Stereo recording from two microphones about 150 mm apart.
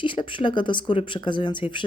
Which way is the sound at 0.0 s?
35° left (ahead or behind).